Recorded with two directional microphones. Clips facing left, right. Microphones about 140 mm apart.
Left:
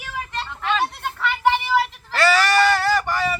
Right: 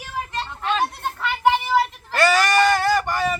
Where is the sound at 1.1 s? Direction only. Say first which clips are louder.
Even; 15° right (ahead or behind).